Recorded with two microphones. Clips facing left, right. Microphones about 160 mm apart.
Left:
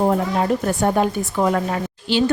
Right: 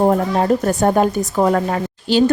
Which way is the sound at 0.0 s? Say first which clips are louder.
Right 3 dB; 40° right (ahead or behind).